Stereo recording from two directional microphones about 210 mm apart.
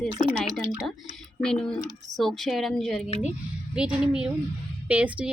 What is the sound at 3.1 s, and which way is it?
Speech, 30° left (ahead or behind).